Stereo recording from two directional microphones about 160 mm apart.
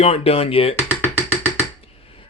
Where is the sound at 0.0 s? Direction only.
40° left (ahead or behind).